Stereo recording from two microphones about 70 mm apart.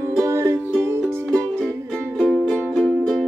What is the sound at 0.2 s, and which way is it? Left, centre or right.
Music, right.